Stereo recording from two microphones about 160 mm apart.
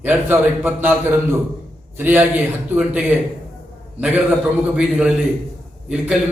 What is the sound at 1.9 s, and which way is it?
A man's voice, 10° right (ahead or behind).